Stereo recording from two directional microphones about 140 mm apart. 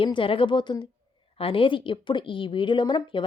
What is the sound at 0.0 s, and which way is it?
Speech, 40° left (ahead or behind).